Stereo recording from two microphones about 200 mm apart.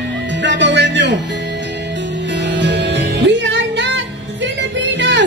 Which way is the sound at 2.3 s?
60° right (ahead or behind).